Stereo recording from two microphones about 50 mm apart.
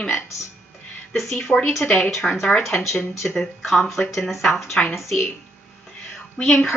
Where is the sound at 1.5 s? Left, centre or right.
Left.